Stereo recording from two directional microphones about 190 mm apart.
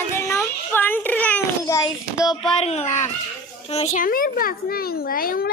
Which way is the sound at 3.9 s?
45° left (ahead or behind).